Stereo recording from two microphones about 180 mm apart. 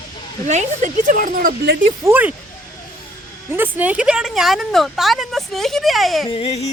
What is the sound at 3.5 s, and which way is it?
Speech, 10° right (ahead or behind).